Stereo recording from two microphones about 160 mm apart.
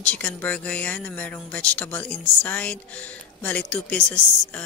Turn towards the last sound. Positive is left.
turn(degrees=10)  # may be behind; listen again after turning